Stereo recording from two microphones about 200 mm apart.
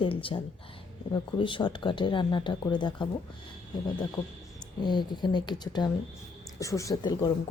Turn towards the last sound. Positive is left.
turn(degrees=20)  # may be behind; listen again after turning